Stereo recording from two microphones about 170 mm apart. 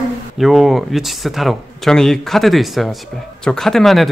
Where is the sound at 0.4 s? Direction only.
Centre (ahead or behind).